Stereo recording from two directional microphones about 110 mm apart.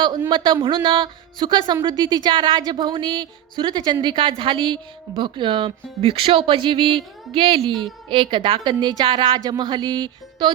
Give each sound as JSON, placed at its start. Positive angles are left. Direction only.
{"t": 0.3, "sound": "speech", "side_deg": -45}